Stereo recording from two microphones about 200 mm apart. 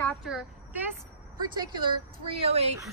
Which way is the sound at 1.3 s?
25° right (ahead or behind).